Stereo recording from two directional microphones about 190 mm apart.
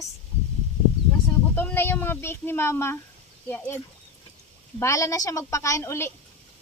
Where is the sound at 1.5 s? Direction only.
10° left (ahead or behind).